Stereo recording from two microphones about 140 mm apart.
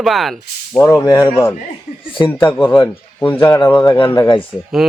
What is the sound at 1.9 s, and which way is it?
Speech, 55° left (ahead or behind).